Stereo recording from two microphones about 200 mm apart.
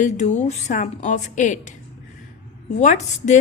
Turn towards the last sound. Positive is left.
turn(degrees=35)  # may be behind; listen again after turning